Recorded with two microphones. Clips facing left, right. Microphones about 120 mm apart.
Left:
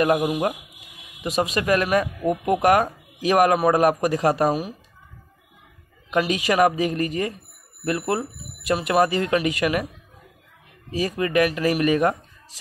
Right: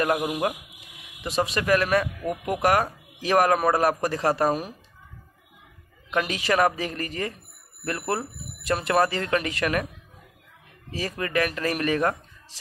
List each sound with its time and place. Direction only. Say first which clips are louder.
0.0 s a man's voice: left 4 dB; 25° left (ahead or behind); by 4.7 s 10° left (ahead or behind)
6.2 s speech: left 3 dB; 15° left (ahead or behind)
10.9 s speech: left 6 dB; 15° left (ahead or behind)